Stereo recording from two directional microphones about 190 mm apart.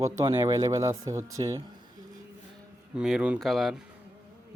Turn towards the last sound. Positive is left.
turn(degrees=0)  # may be behind; listen again after turning